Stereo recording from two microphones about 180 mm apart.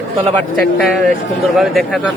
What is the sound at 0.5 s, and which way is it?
Speech, 5° left (ahead or behind).